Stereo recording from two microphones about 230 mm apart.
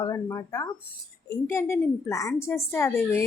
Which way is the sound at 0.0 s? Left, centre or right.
Centre.